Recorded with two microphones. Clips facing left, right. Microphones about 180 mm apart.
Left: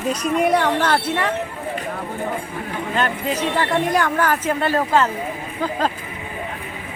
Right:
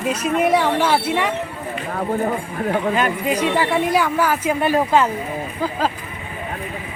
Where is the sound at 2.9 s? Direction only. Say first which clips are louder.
Right 2 dB; 10° right (ahead or behind).